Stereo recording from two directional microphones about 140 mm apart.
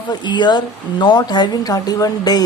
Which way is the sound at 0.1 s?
30° left (ahead or behind).